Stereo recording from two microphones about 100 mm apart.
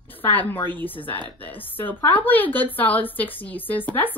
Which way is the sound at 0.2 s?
20° left (ahead or behind).